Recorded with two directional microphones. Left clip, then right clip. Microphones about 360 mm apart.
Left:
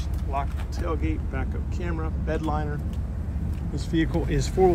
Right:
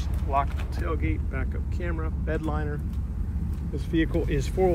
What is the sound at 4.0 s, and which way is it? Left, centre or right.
Speech, left.